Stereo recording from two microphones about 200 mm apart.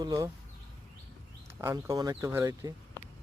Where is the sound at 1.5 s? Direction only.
15° right (ahead or behind).